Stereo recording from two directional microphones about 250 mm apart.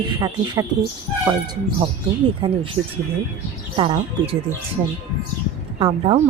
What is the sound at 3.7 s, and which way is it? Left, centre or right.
Speech, right.